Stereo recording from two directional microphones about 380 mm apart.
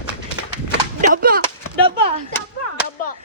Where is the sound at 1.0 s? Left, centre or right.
Right.